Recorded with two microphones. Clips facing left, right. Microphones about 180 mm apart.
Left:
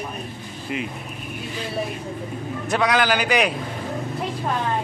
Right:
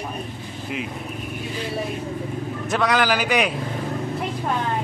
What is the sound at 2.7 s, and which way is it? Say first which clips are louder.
Speech: even; centre (ahead or behind).